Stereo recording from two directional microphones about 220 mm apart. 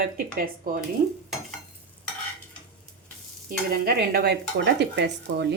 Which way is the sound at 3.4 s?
45° right (ahead or behind).